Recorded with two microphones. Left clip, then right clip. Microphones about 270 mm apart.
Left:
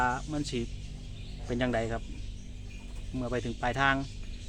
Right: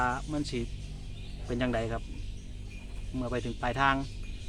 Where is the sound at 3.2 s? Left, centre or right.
Centre.